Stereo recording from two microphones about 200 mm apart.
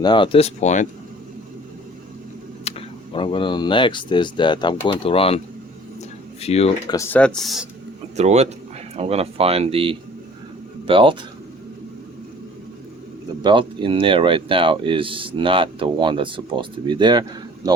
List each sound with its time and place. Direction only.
0.0 s speech: 25° left (ahead or behind)
2.6 s speech: 30° left (ahead or behind)
6.4 s speech: 30° left (ahead or behind)
6.9 s speech: 10° left (ahead or behind)
8.1 s speech: 35° right (ahead or behind)
13.4 s speech: 25° right (ahead or behind)